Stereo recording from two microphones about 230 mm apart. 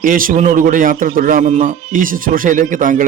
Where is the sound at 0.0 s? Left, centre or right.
Right.